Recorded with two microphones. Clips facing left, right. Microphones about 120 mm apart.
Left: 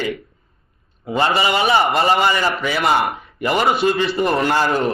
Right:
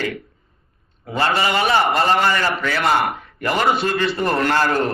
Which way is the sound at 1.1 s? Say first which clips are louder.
Left 2 dB; 15° left (ahead or behind).